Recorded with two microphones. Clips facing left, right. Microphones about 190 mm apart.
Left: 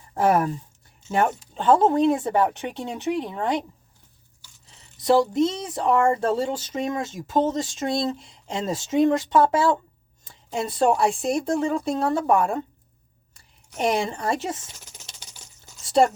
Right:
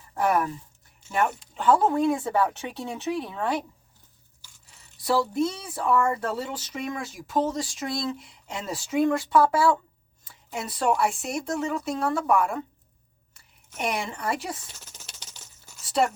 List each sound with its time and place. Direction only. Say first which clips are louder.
0.1 s speech: left 4 dB; 30° left (ahead or behind)
4.9 s speech: left 5 dB; 20° left (ahead or behind)
13.7 s speech: left 6 dB; 30° left (ahead or behind)
15.2 s patter: left 1 dB; 10° left (ahead or behind)
16.0 s a woman's voice: left 5 dB; 35° left (ahead or behind)